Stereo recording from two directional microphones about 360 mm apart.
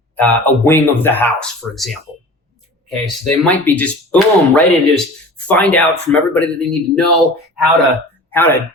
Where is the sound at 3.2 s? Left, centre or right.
Centre.